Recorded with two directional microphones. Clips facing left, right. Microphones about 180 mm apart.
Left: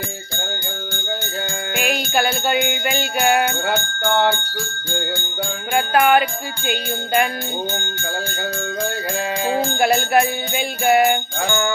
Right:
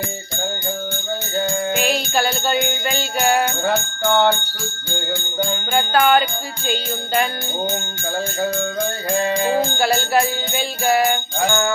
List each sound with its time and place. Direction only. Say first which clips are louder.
1.7 s music: left 3 dB; 10° left (ahead or behind)
5.9 s music: left 1 dB; 10° left (ahead or behind)
9.7 s music: left 2 dB; 20° left (ahead or behind)